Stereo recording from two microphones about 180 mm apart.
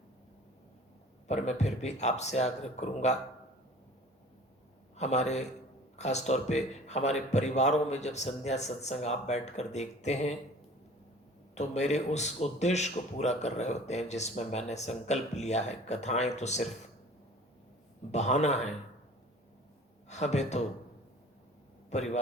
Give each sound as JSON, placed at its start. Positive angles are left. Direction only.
{"t": 1.3, "sound": "speech", "side_deg": 40}
{"t": 4.9, "sound": "speech", "side_deg": 40}
{"t": 11.5, "sound": "speech", "side_deg": 40}
{"t": 18.1, "sound": "speech", "side_deg": 40}
{"t": 20.1, "sound": "speech", "side_deg": 40}
{"t": 21.8, "sound": "a man's voice", "side_deg": 40}